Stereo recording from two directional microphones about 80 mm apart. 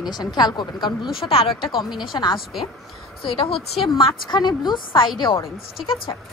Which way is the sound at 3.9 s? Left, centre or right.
Left.